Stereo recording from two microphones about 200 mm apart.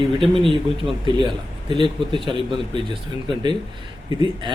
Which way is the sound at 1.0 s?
25° right (ahead or behind).